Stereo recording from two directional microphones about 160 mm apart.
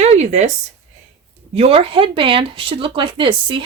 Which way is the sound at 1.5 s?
35° right (ahead or behind).